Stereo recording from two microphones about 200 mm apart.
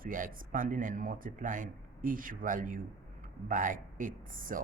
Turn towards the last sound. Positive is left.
turn(degrees=-40)  # may be behind; listen again after turning